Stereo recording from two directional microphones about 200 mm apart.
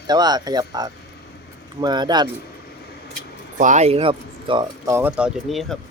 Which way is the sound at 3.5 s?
40° right (ahead or behind).